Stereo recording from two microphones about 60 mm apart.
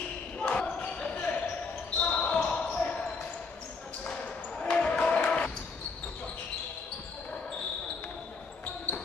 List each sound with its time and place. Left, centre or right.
0.4 s basketball bounce: centre
4.6 s basketball bounce: centre